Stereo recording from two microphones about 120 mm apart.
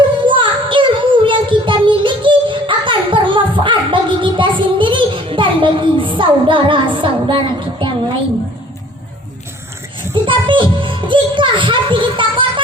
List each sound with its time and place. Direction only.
0.3 s child singing: 45° right (ahead or behind)
10.2 s music: 45° right (ahead or behind)